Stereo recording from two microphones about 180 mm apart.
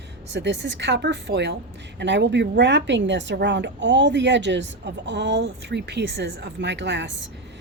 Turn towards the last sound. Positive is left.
turn(degrees=-75)  # may be behind; listen again after turning